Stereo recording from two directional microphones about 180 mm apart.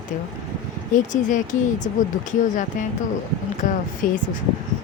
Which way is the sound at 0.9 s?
45° left (ahead or behind).